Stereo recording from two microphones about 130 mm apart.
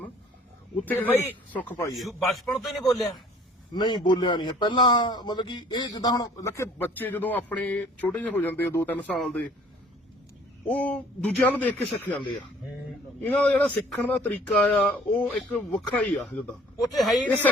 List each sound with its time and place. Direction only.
0.8 s speech: 15° left (ahead or behind)
1.9 s a man's voice: centre (ahead or behind)
3.8 s a man's voice: 35° left (ahead or behind); by 9.1 s 15° left (ahead or behind)
9.1 s a man's voice: centre (ahead or behind)
10.7 s speech: 10° left (ahead or behind)
13.2 s a man's voice: 10° left (ahead or behind)
17.2 s speech: 10° left (ahead or behind)